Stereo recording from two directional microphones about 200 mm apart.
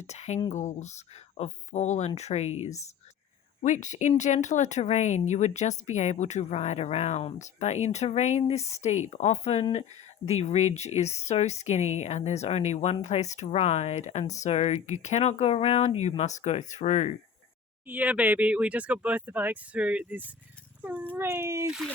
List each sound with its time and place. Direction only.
0.0 s speech: 35° left (ahead or behind)
17.8 s speech: 10° right (ahead or behind)